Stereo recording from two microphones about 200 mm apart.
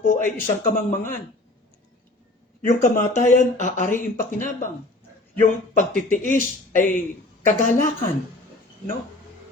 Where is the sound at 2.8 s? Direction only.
40° left (ahead or behind).